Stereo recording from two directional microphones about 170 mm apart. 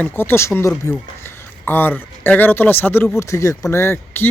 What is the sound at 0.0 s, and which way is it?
A man's voice, 15° left (ahead or behind).